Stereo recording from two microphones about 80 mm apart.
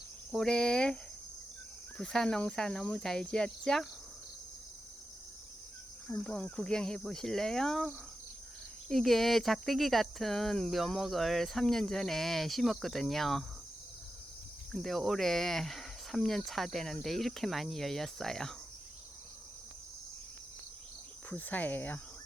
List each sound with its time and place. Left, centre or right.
0.3 s speech: centre
2.0 s speech: centre
6.1 s speech: centre
14.7 s speech: centre
21.2 s speech: left